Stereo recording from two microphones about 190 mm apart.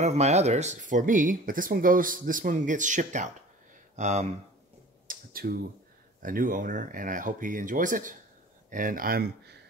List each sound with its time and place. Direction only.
0.0 s speech: 35° right (ahead or behind)
5.0 s a sound: 50° right (ahead or behind)
6.2 s speech: 45° right (ahead or behind)